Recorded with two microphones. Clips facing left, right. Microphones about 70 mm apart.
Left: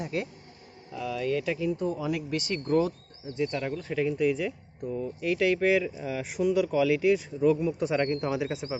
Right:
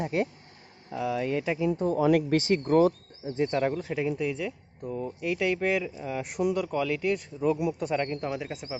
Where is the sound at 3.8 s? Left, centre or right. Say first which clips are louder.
Left 3 dB; centre.